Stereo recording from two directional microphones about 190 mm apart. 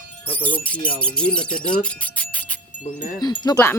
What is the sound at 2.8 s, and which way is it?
Wind chime, 45° left (ahead or behind).